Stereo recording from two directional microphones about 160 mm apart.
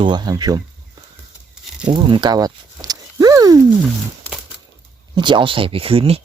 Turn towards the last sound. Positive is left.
turn(degrees=-35)  # may be behind; listen again after turning